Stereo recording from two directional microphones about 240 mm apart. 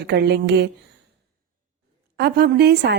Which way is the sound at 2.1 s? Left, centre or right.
Right.